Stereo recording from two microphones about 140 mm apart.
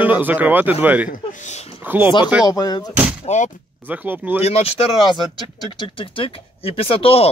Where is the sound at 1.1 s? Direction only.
65° left (ahead or behind).